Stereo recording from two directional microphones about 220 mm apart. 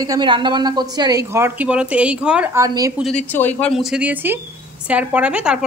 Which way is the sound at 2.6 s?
15° right (ahead or behind).